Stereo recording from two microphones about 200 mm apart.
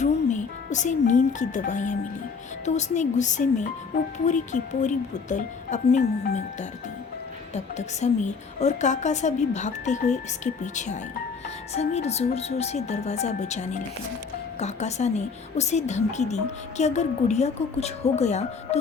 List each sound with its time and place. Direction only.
0.0 s a woman's voice: 35° left (ahead or behind)
7.5 s a woman's voice: 35° left (ahead or behind)